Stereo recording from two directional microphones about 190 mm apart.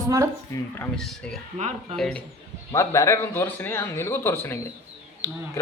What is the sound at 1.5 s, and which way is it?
Speech, 35° right (ahead or behind).